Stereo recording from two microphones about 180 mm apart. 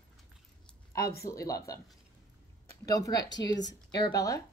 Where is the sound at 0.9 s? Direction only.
55° left (ahead or behind).